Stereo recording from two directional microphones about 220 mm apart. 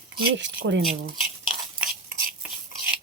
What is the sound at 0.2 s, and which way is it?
Speech, 50° right (ahead or behind).